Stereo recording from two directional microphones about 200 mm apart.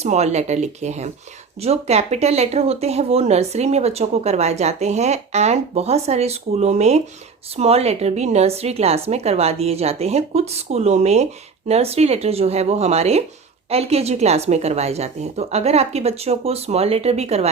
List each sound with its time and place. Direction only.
0.0 s speech: 35° right (ahead or behind)